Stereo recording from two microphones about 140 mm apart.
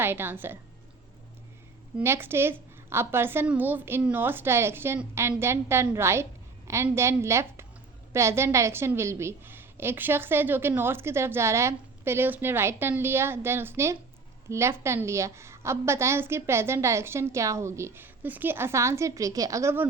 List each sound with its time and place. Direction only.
0.0 s a woman's voice: 15° right (ahead or behind)
2.0 s a woman's voice: 15° right (ahead or behind)